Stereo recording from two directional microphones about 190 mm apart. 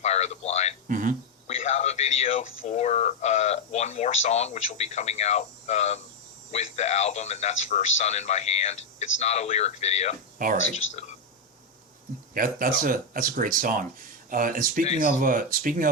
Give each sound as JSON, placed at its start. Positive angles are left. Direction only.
{"t": 0.0, "sound": "a sound", "side_deg": 35}
{"t": 0.9, "sound": "speech", "side_deg": -45}
{"t": 1.5, "sound": "speech", "side_deg": 35}
{"t": 10.3, "sound": "speech", "side_deg": -45}
{"t": 10.8, "sound": "speech", "side_deg": 90}
{"t": 12.3, "sound": "speech", "side_deg": -50}